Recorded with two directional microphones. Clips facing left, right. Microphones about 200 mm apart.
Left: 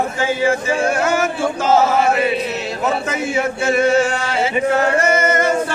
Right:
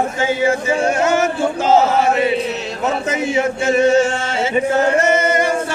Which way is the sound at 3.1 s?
20° right (ahead or behind).